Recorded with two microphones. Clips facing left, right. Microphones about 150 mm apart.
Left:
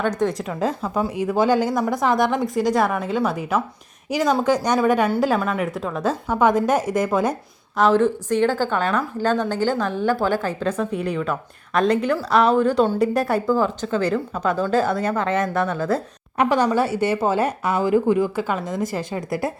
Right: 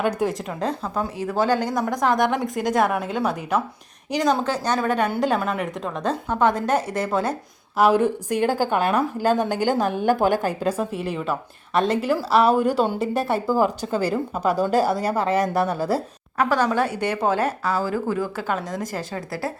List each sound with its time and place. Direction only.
0.2 s a woman's voice: centre (ahead or behind)
7.8 s a woman's voice: 10° right (ahead or behind)
16.4 s a woman's voice: 15° left (ahead or behind)